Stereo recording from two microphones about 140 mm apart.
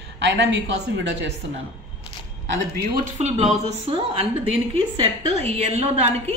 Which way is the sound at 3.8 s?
40° right (ahead or behind).